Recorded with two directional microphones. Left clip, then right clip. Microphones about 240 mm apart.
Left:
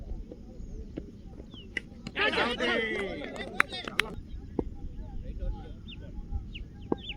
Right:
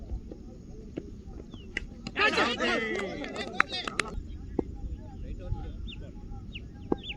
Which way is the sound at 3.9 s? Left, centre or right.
Right.